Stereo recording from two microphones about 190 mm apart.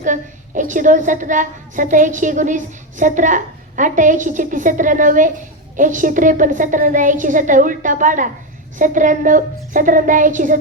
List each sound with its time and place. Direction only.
0.0 s a woman's voice: 40° right (ahead or behind)